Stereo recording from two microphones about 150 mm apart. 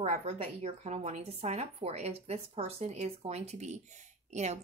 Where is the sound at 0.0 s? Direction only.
45° right (ahead or behind).